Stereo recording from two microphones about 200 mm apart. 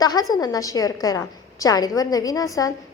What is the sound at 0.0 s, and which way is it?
A woman's voice, 20° left (ahead or behind).